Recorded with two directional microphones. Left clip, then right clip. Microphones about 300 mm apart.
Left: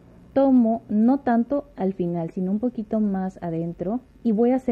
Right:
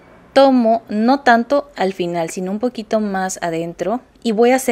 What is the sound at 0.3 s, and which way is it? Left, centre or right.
Speech, centre.